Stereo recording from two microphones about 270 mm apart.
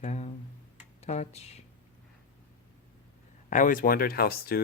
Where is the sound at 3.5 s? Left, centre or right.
Left.